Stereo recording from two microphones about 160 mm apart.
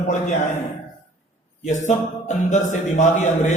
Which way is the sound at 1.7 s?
50° left (ahead or behind).